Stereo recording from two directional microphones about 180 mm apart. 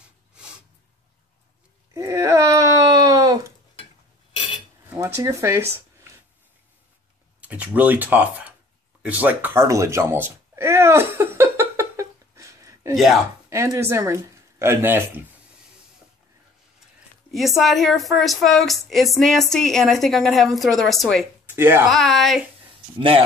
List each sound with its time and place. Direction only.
2.0 s a sound: 15° right (ahead or behind)
4.9 s speech: 15° right (ahead or behind)
7.3 s speech: 10° right (ahead or behind)
9.0 s a sound: 10° right (ahead or behind)
12.9 s a woman's voice: centre (ahead or behind)
13.5 s speech: 15° right (ahead or behind)
17.3 s a woman's voice: centre (ahead or behind)
21.5 s speech: 15° right (ahead or behind)
21.8 s a woman's voice: centre (ahead or behind)
22.9 s speech: 30° right (ahead or behind)